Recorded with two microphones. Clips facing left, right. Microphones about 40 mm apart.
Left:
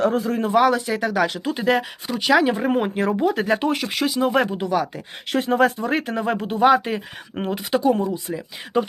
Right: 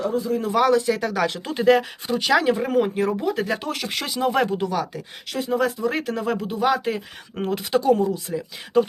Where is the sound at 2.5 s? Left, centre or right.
Left.